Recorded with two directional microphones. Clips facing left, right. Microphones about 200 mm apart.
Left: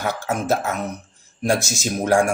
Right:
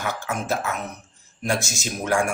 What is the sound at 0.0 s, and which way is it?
Speech, 40° left (ahead or behind).